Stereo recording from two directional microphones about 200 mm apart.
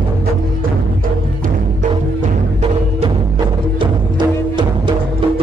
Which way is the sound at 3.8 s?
25° right (ahead or behind).